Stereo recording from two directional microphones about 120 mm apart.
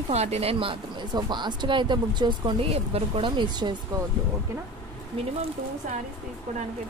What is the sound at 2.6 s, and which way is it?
Speech, 55° right (ahead or behind).